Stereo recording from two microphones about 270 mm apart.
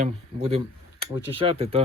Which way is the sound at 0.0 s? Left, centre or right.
Right.